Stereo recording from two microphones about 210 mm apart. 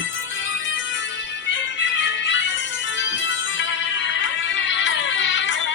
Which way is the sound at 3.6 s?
60° left (ahead or behind).